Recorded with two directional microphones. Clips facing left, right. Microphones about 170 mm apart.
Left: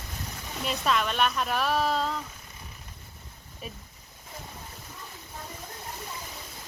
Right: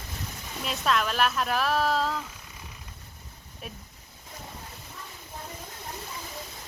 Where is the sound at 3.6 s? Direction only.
Centre (ahead or behind).